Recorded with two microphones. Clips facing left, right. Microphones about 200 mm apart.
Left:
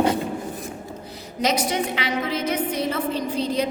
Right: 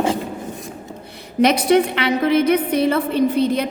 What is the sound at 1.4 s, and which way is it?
A woman's voice, 60° right (ahead or behind).